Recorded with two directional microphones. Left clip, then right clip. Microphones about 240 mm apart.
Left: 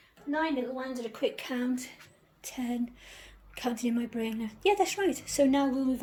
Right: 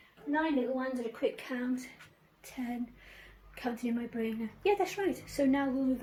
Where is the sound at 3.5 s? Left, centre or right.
Left.